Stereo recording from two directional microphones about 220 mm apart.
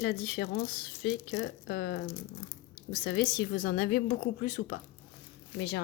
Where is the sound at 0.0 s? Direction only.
45° left (ahead or behind).